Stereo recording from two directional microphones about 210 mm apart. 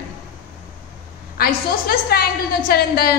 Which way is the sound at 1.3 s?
45° left (ahead or behind).